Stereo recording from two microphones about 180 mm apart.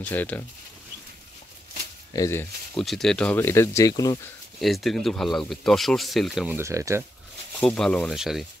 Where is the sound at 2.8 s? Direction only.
Centre (ahead or behind); by 4.2 s 20° left (ahead or behind).